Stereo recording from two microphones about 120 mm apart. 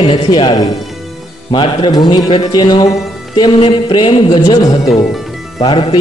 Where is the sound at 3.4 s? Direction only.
45° left (ahead or behind).